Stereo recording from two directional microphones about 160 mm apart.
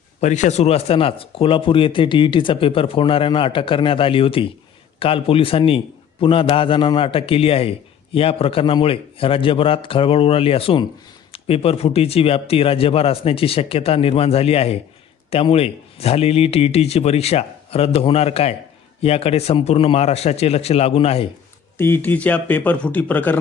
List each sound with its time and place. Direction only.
0.2 s speech: 45° left (ahead or behind)
21.8 s speech: 15° left (ahead or behind)